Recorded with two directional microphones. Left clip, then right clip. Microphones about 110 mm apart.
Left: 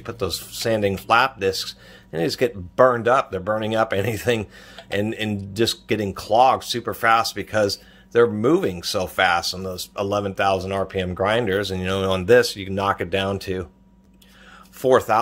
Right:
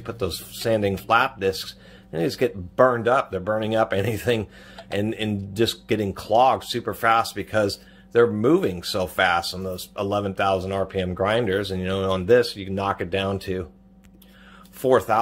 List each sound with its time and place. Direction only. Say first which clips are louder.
0.0 s speech: left 2 dB; 25° left (ahead or behind)
14.8 s speech: left 2 dB; 25° left (ahead or behind)